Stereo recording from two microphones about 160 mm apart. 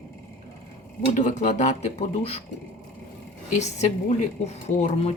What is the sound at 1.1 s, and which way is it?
A woman's voice, 50° left (ahead or behind).